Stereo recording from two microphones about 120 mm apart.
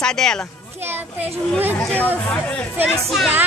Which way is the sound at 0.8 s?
15° right (ahead or behind).